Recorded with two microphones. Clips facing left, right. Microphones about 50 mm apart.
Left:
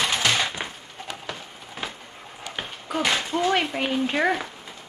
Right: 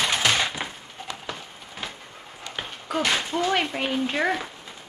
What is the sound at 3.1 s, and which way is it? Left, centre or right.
Speech, centre.